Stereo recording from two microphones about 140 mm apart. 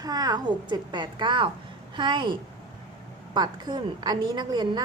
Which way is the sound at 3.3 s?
30° right (ahead or behind).